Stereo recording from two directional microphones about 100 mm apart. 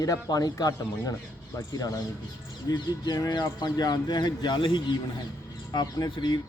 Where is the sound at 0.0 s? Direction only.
35° left (ahead or behind).